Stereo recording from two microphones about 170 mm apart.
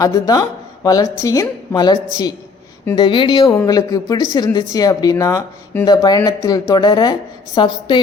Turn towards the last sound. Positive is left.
turn(degrees=25)  # may be behind; listen again after turning